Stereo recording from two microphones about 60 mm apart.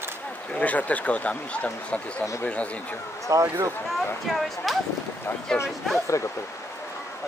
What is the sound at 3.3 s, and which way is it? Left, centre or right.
Speech, right.